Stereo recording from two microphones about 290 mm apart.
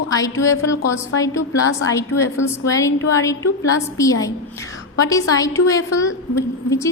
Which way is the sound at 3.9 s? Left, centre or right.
Centre.